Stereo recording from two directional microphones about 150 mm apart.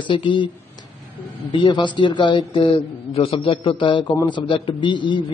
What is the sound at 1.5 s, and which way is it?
A man's voice, 35° left (ahead or behind).